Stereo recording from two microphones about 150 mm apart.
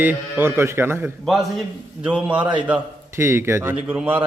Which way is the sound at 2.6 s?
15° right (ahead or behind).